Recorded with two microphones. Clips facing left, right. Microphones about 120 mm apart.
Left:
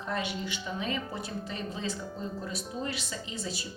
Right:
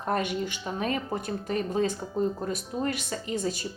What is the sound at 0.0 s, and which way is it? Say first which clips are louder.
Speech: right 6 dB; 50° right (ahead or behind).